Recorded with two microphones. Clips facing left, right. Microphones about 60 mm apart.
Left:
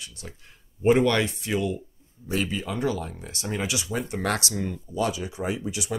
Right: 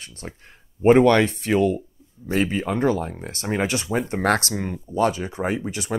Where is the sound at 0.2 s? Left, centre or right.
Right.